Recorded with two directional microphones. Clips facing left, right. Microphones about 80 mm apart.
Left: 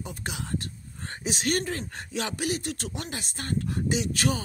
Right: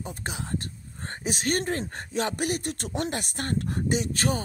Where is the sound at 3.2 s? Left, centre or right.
Right.